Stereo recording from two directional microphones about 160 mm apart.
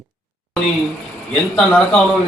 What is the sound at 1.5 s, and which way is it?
Speech, 5° left (ahead or behind).